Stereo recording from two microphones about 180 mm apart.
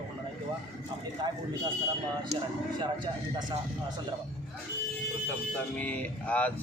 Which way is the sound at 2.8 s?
25° right (ahead or behind).